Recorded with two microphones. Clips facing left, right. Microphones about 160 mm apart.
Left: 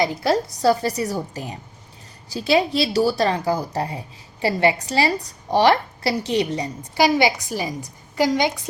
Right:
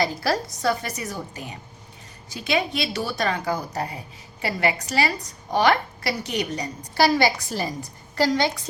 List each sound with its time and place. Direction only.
0.0 s a woman's voice: 20° left (ahead or behind)